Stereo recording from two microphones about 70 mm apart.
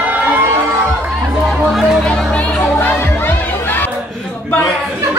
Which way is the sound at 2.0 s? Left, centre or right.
Centre.